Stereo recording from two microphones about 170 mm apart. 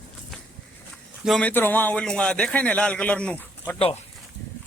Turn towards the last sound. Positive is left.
turn(degrees=10)  # may be behind; listen again after turning